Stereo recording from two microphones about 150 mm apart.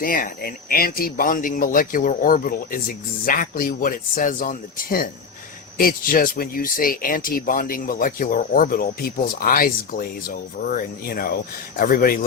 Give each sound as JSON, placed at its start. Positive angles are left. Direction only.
{"t": 0.0, "sound": "speech", "side_deg": 70}